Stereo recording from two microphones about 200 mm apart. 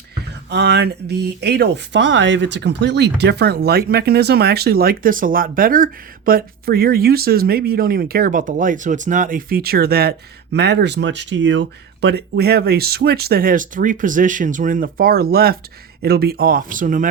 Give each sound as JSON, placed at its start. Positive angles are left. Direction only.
{"t": 0.5, "sound": "speech", "side_deg": -55}